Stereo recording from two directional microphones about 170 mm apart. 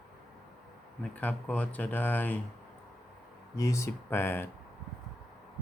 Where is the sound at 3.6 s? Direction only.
20° left (ahead or behind).